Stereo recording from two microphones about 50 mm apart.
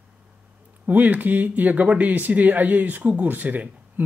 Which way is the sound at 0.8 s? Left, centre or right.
Right.